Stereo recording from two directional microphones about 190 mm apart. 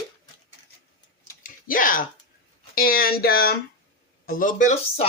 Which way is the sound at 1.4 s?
45° left (ahead or behind).